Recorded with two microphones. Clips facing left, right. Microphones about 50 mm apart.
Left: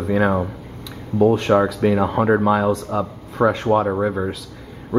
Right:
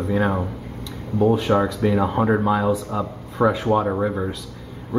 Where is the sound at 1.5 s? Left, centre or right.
Centre.